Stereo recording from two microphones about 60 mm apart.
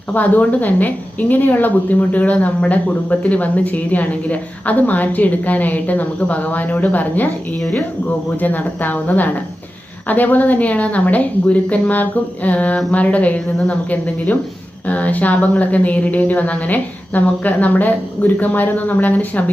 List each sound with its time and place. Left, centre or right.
0.1 s a woman's voice: left
8.4 s a woman's voice: left